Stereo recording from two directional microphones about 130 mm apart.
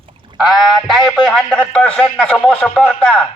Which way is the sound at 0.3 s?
5° right (ahead or behind).